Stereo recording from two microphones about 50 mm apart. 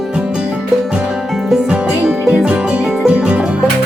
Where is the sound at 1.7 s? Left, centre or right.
Centre.